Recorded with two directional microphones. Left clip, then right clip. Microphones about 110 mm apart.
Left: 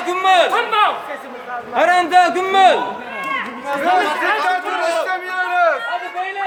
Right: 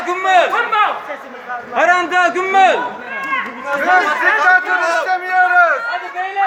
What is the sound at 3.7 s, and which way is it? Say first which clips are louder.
A man's voice: right 3 dB; 5° right (ahead or behind).